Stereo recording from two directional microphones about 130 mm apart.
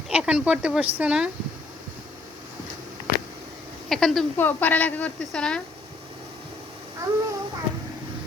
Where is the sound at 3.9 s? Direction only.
Centre (ahead or behind).